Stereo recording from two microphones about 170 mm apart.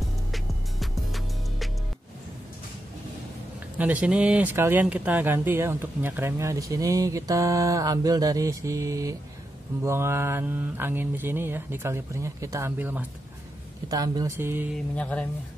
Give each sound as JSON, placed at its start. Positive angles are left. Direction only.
{"t": 0.3, "sound": "music", "side_deg": 0}
{"t": 3.7, "sound": "speech", "side_deg": -10}
{"t": 13.8, "sound": "mantra", "side_deg": -20}
{"t": 15.0, "sound": "speech", "side_deg": 10}